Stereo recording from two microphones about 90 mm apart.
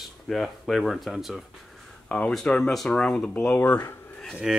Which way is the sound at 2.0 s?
15° left (ahead or behind).